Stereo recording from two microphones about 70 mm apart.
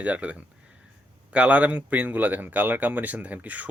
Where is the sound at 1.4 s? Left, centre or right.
Right.